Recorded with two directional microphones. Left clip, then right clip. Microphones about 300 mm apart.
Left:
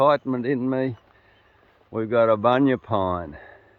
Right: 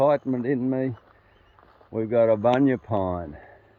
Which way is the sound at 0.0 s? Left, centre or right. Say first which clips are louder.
Left 2 dB; centre.